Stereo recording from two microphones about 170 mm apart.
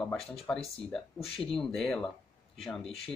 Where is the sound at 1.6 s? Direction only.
Centre (ahead or behind).